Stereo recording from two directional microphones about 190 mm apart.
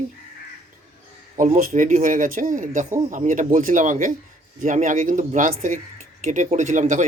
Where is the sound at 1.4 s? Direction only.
45° right (ahead or behind).